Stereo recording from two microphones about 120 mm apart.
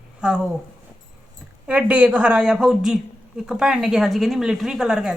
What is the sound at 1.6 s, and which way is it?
A man's voice, 10° right (ahead or behind).